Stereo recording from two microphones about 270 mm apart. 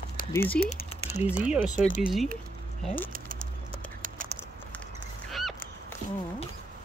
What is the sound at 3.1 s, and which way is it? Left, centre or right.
Bird, right.